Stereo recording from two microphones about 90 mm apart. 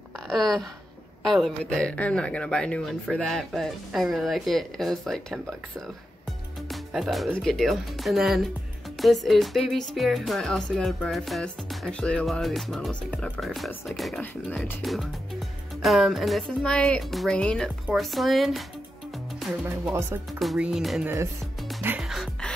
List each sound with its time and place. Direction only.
0.3 s speech: 5° left (ahead or behind)
6.7 s music: centre (ahead or behind)
7.3 s speech: 5° left (ahead or behind)
11.9 s speech: 15° left (ahead or behind)
12.3 s speech: centre (ahead or behind)
19.9 s speech: 30° right (ahead or behind)
20.5 s speech: 10° right (ahead or behind)
22.0 s music: centre (ahead or behind)